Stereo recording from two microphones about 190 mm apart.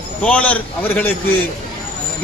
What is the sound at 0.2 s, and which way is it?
Speech, 5° left (ahead or behind).